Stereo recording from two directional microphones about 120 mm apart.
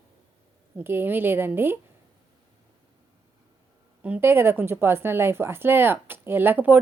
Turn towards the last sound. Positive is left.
turn(degrees=-15)  # may be behind; listen again after turning